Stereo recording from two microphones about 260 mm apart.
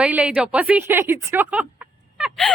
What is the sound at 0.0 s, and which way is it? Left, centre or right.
A woman's voice, centre.